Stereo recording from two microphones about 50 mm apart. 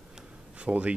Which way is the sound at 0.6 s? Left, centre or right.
Right.